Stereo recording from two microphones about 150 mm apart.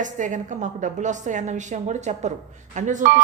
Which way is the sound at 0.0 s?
55° right (ahead or behind).